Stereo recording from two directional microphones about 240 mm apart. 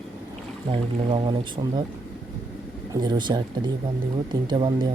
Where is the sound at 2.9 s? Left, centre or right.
Centre.